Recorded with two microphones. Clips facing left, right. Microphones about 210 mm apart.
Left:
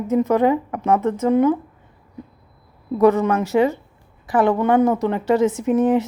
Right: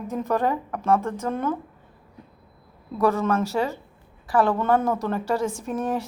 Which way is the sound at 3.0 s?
15° left (ahead or behind).